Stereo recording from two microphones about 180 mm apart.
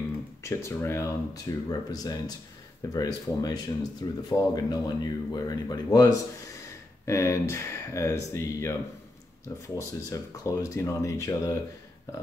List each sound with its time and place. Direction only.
0.4 s speech: 15° left (ahead or behind)
9.8 s speech: 20° left (ahead or behind)